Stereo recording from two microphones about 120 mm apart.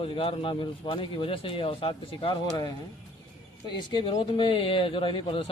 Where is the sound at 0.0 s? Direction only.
50° left (ahead or behind).